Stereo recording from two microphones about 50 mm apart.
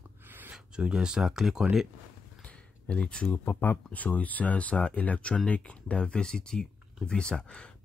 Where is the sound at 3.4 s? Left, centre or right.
Left.